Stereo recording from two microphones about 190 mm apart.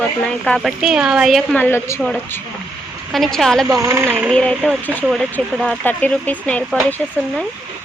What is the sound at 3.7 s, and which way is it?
Speech, 15° right (ahead or behind).